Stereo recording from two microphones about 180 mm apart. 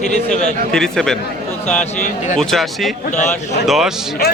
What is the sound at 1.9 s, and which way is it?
Speech, 45° left (ahead or behind).